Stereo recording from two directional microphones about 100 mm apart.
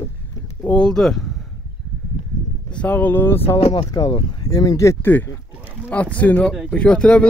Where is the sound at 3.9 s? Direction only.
40° left (ahead or behind).